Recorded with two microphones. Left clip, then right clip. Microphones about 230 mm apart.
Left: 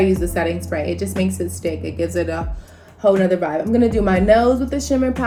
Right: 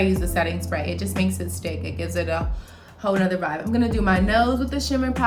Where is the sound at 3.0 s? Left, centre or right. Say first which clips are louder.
Left 7 dB; centre.